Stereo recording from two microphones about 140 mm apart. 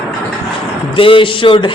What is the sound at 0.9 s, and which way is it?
Speech, 40° left (ahead or behind).